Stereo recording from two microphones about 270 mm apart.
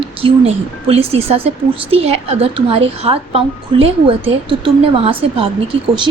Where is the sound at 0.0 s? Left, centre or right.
Right.